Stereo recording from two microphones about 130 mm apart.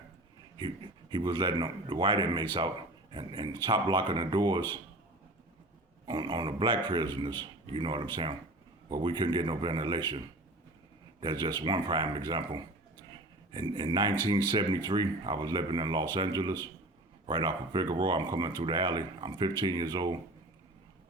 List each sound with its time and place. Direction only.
1.1 s speech: 35° right (ahead or behind)
6.1 s speech: 35° right (ahead or behind)
13.1 s a sound: 35° right (ahead or behind)
14.5 s speech: 35° right (ahead or behind)